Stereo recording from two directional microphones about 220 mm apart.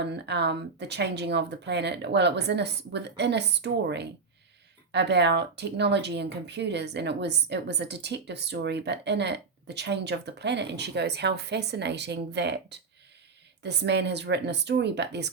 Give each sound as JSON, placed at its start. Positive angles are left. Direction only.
{"t": 0.0, "sound": "speech", "side_deg": -50}
{"t": 13.6, "sound": "speech", "side_deg": -50}